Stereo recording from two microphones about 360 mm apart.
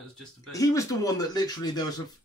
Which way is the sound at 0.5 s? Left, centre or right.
Centre.